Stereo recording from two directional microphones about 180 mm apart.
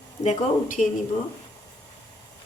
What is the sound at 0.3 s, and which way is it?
Speech, 40° left (ahead or behind).